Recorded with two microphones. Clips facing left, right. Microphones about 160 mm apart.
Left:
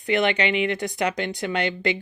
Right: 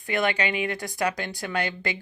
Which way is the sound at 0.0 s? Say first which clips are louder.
Left 4 dB; 20° left (ahead or behind).